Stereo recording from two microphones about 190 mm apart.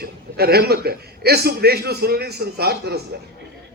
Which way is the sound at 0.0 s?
55° right (ahead or behind).